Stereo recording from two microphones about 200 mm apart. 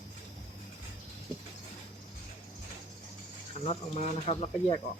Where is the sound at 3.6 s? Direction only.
35° left (ahead or behind).